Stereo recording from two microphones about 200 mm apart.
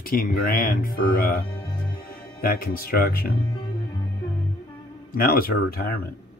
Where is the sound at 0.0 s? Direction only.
45° left (ahead or behind).